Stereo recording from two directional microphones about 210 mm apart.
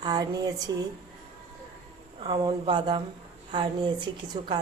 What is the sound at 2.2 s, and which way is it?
A woman's voice, 20° right (ahead or behind).